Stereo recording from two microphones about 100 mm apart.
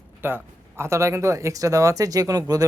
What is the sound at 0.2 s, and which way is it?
Speech, 20° right (ahead or behind).